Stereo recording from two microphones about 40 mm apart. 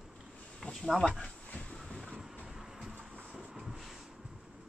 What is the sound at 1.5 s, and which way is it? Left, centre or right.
Train, left.